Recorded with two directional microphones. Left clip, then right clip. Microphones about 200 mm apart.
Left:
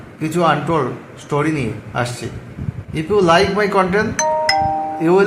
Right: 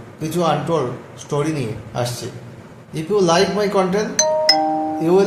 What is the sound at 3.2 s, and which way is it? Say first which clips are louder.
Speech: left 3 dB; 15° left (ahead or behind).